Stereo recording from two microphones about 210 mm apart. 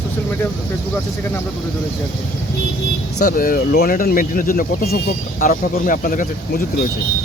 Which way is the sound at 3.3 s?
40° left (ahead or behind).